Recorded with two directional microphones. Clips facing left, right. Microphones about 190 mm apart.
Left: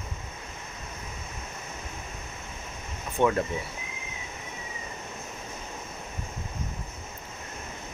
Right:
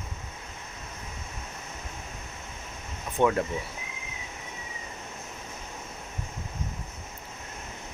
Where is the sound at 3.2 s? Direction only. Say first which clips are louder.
Even; 15° right (ahead or behind).